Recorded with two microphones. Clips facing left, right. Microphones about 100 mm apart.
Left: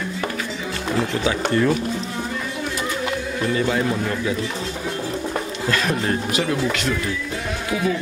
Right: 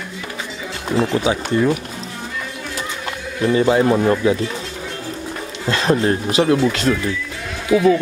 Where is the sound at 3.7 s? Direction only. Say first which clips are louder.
Right 7 dB; 40° right (ahead or behind).